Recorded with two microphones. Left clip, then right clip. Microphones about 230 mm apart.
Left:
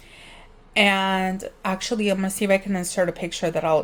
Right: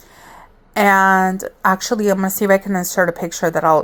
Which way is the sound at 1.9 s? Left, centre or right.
Centre.